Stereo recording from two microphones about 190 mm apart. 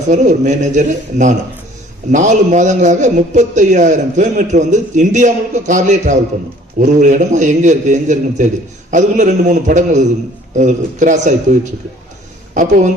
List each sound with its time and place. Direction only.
0.1 s a man's voice: 40° right (ahead or behind)
12.5 s speech: 40° right (ahead or behind)